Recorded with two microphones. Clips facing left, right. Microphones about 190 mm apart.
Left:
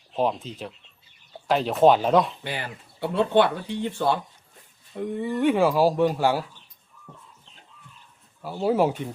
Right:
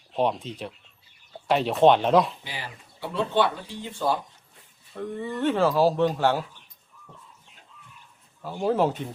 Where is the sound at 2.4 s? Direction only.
60° left (ahead or behind).